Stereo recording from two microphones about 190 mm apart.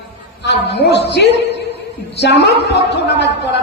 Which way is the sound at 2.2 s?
60° left (ahead or behind).